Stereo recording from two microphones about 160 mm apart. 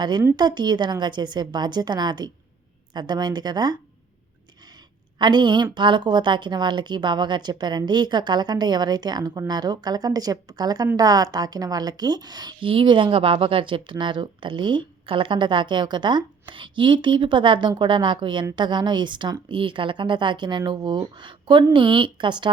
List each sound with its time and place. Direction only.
0.0 s a woman's voice: 25° right (ahead or behind)
5.2 s a woman's voice: 30° right (ahead or behind)